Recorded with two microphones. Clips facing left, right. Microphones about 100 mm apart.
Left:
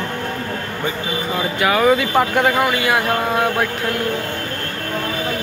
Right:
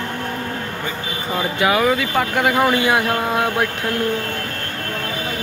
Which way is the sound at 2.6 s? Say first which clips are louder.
Right 1 dB; 25° right (ahead or behind).